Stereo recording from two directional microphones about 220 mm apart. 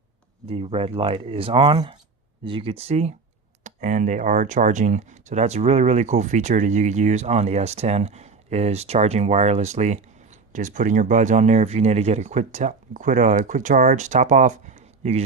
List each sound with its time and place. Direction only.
0.4 s speech: 25° right (ahead or behind)